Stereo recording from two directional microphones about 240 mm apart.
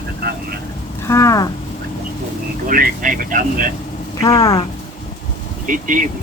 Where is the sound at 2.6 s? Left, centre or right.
Right.